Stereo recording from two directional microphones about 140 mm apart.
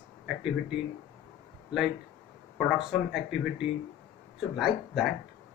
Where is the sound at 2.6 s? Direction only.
5° right (ahead or behind).